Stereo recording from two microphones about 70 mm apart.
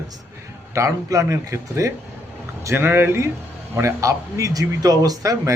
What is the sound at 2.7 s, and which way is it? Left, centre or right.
Speech, right.